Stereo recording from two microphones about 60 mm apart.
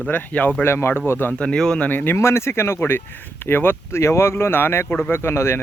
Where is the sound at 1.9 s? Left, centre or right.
Left.